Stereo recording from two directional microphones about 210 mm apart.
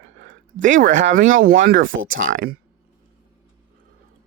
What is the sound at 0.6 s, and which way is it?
Speech, 40° right (ahead or behind).